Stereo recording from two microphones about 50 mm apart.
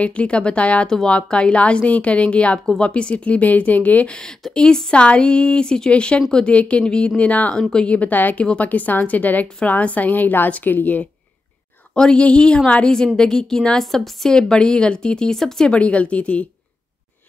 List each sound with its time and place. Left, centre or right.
0.0 s a woman's voice: left
0.8 s speech: centre
1.1 s a woman's voice: left
4.1 s a woman's voice: centre; by 11.1 s left
11.9 s speech: centre
15.7 s a woman's voice: left